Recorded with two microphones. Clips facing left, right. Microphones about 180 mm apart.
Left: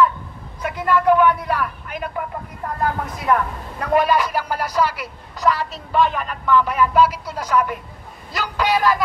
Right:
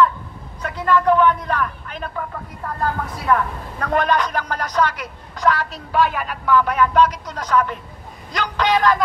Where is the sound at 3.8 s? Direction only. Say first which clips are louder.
Left 2 dB; 5° left (ahead or behind).